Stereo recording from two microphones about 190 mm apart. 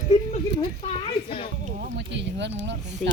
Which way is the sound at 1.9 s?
65° right (ahead or behind).